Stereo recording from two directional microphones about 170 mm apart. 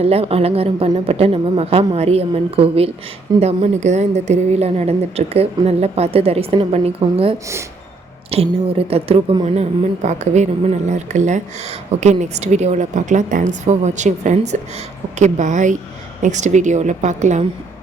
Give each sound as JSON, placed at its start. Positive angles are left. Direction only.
{"t": 0.0, "sound": "a woman's voice", "side_deg": -35}
{"t": 10.0, "sound": "a woman's voice", "side_deg": -45}